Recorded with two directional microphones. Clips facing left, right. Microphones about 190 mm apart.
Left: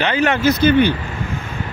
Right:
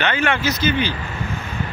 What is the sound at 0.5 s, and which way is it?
Speech, 55° left (ahead or behind).